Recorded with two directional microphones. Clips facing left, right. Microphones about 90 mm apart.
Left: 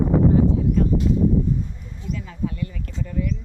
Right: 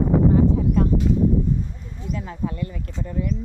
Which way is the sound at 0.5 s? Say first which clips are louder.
Even; 50° right (ahead or behind).